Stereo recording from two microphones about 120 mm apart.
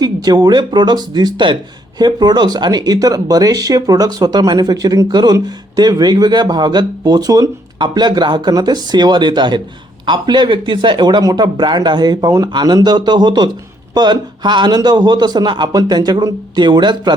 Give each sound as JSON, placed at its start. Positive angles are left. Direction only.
{"t": 0.0, "sound": "speech", "side_deg": -35}